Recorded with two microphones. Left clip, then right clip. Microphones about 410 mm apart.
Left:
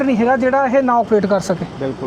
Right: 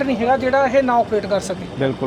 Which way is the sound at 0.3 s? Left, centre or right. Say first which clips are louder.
Even; left.